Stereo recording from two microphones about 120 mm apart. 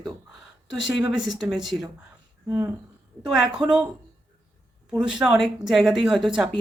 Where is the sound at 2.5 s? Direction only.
20° right (ahead or behind).